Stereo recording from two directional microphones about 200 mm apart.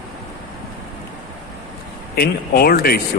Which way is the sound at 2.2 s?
50° left (ahead or behind).